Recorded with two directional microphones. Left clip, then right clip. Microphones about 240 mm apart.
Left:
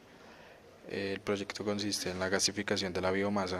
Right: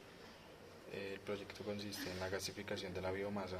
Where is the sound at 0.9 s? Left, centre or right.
Left.